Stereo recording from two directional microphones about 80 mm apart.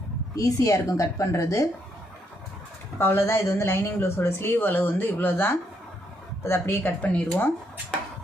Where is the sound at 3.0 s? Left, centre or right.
Left.